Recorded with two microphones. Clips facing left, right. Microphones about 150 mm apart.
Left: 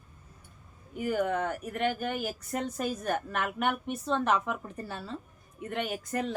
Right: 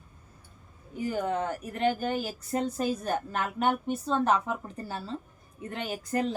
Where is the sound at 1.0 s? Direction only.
30° right (ahead or behind).